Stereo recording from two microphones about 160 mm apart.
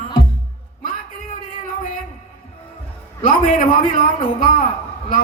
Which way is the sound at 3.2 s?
60° left (ahead or behind).